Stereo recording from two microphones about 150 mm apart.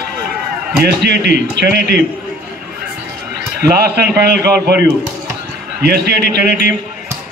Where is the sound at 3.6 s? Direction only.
90° right.